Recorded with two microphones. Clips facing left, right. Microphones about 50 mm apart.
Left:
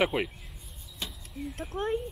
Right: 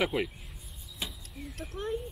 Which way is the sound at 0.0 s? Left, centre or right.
Centre.